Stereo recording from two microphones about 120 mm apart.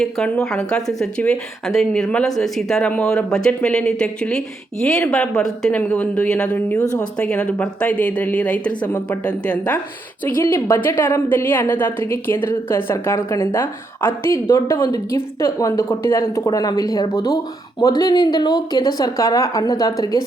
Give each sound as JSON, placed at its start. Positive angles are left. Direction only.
{"t": 0.0, "sound": "a woman's voice", "side_deg": 5}